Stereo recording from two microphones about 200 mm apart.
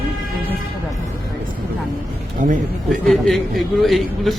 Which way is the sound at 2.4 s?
40° right (ahead or behind).